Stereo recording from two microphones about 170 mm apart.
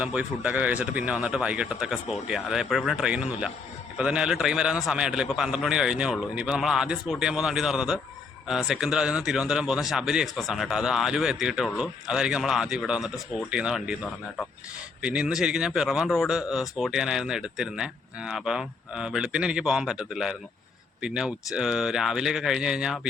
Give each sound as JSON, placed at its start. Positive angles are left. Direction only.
{"t": 0.0, "sound": "speech", "side_deg": -5}
{"t": 15.0, "sound": "speech", "side_deg": -5}